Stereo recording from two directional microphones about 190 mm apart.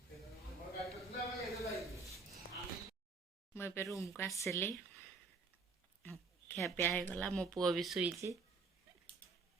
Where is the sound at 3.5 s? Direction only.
15° left (ahead or behind).